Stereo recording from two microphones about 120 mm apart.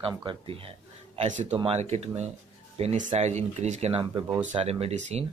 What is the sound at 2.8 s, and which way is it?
Speech, 80° right.